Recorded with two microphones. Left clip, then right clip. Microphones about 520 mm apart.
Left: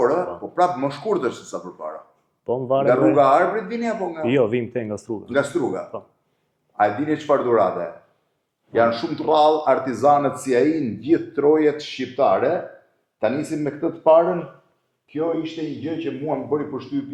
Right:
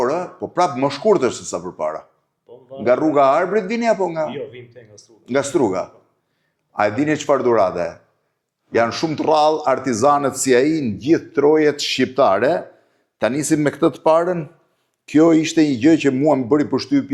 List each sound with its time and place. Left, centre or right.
0.0 s speech: right
2.5 s speech: left
2.8 s a man's voice: right
4.3 s speech: left
6.7 s a man's voice: right
11.8 s a man's voice: right
13.1 s a man's voice: right
15.0 s a man's voice: right
16.3 s speech: right